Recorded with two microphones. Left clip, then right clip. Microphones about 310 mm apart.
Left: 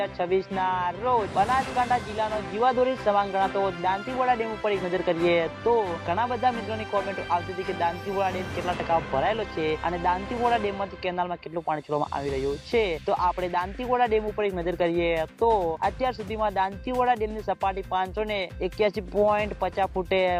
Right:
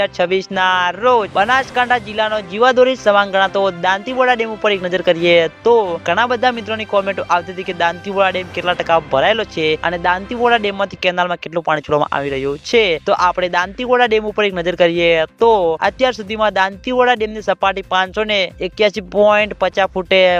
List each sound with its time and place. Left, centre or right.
0.0 s speech: right